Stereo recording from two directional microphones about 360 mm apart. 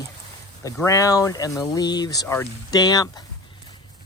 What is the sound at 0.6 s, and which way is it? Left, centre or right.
Speech, centre.